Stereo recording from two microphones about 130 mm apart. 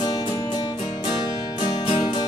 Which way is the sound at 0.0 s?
30° left (ahead or behind).